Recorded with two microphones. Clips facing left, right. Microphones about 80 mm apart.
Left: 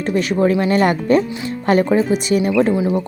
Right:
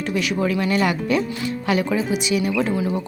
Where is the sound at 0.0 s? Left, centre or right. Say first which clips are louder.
Left 6 dB; left.